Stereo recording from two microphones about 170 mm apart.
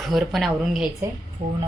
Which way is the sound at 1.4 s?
45° right (ahead or behind).